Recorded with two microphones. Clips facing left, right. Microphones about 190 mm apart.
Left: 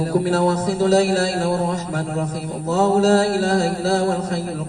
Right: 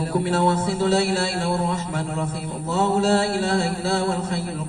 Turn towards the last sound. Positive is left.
turn(degrees=40)  # may be behind; listen again after turning